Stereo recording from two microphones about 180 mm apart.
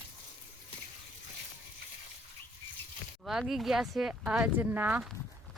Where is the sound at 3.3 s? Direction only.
Centre (ahead or behind).